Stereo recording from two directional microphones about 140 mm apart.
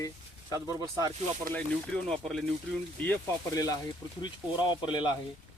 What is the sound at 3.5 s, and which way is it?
A man's voice, 25° left (ahead or behind).